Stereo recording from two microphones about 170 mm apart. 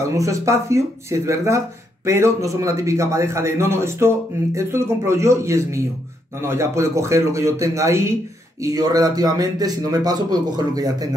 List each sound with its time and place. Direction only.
0.1 s a man's voice: 20° right (ahead or behind)